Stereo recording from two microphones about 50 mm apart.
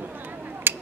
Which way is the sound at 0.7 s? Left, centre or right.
Right.